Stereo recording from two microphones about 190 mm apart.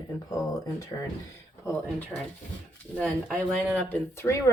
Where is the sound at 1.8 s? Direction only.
10° left (ahead or behind).